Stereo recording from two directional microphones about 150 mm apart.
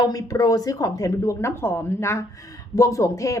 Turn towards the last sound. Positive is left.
turn(degrees=20)  # may be behind; listen again after turning